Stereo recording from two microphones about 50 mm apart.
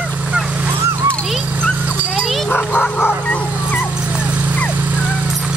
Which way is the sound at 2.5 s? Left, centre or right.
Left.